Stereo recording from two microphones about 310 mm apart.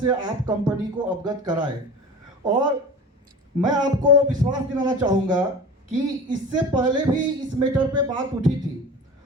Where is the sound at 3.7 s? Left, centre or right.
Centre.